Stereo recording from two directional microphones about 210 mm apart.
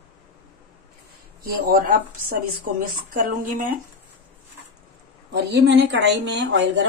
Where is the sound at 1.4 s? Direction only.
45° right (ahead or behind).